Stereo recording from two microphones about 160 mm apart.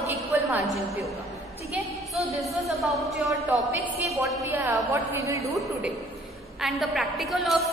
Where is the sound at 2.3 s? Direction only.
Centre (ahead or behind).